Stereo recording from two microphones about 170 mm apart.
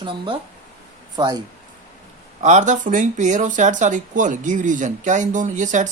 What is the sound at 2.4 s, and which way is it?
Speech, 45° right (ahead or behind).